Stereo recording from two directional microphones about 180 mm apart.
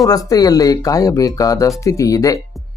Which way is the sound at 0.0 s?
20° left (ahead or behind).